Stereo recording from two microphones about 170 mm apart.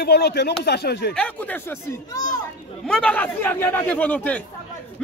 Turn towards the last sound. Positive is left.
turn(degrees=10)  # may be behind; listen again after turning